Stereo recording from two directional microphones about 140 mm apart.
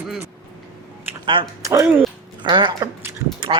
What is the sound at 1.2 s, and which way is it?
Speech, 40° right (ahead or behind).